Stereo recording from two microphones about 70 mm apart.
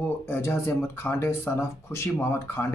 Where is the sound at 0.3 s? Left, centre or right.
Left.